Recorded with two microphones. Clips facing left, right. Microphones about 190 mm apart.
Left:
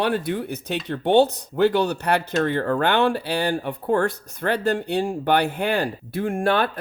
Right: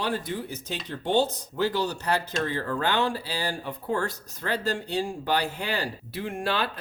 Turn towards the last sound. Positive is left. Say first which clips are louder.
# left 7 dB
turn(degrees=55)  # may be behind; listen again after turning